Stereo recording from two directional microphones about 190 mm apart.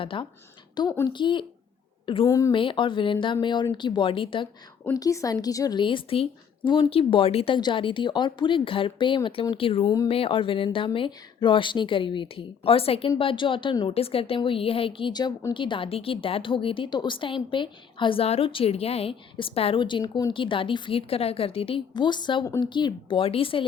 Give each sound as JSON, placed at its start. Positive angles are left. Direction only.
{"t": 0.0, "sound": "a woman's voice", "side_deg": 25}
{"t": 2.5, "sound": "speech", "side_deg": 25}